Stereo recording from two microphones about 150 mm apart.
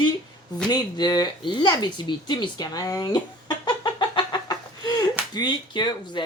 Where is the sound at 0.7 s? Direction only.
25° left (ahead or behind).